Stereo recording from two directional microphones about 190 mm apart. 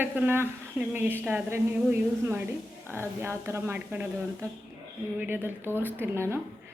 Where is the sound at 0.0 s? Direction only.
10° right (ahead or behind).